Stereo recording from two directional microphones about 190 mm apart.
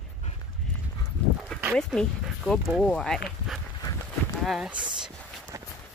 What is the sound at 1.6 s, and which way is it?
Speech, centre (ahead or behind).